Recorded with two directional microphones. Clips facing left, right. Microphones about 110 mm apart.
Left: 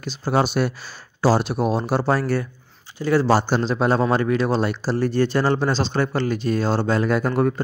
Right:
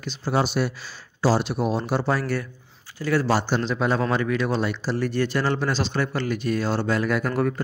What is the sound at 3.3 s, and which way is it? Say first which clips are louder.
Speech: left 4 dB; 40° left (ahead or behind).